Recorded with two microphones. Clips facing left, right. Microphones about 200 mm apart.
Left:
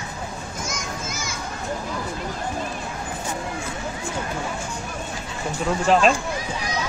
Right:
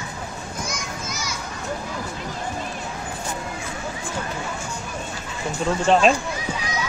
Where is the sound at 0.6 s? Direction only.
50° left (ahead or behind).